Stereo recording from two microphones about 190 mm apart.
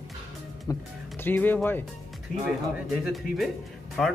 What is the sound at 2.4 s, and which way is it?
Speech, centre (ahead or behind).